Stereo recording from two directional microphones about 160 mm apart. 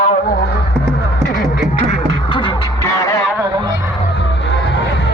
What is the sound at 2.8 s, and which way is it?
Music, 20° left (ahead or behind).